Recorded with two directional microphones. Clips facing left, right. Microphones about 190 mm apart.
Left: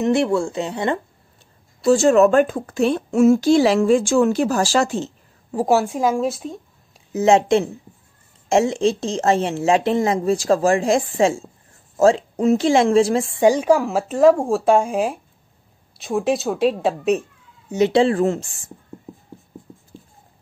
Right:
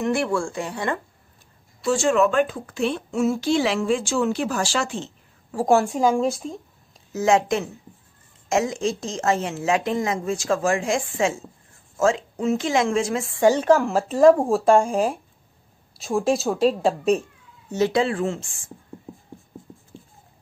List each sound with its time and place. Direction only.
0.0 s speech: 20° left (ahead or behind)
1.8 s a woman's voice: 40° left (ahead or behind)
5.7 s speech: 5° left (ahead or behind)
7.1 s a woman's voice: 25° left (ahead or behind)
13.4 s speech: 10° left (ahead or behind)
17.6 s speech: 15° left (ahead or behind)
17.9 s a woman's voice: 35° left (ahead or behind)
19.1 s a sound: centre (ahead or behind)